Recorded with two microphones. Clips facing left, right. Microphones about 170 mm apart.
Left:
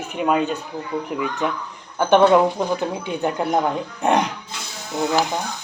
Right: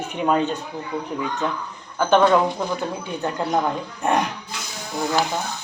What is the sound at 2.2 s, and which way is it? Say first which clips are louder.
Speech: left 3 dB; 10° left (ahead or behind).